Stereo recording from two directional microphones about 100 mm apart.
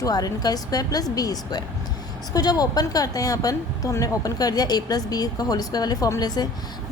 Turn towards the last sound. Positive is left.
turn(degrees=45)  # may be behind; listen again after turning